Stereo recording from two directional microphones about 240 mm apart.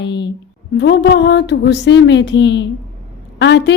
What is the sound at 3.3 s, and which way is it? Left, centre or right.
Speech, left.